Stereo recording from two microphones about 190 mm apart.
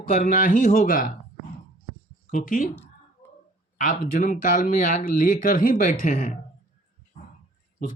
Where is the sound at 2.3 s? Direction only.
45° left (ahead or behind).